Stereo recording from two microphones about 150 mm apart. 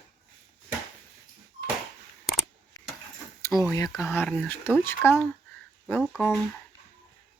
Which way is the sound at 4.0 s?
15° left (ahead or behind).